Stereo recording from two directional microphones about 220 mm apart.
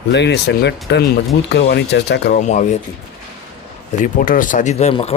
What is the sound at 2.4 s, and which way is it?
Speech, 30° left (ahead or behind).